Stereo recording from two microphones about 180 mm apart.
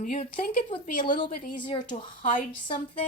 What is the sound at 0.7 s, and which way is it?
Speech, 25° left (ahead or behind).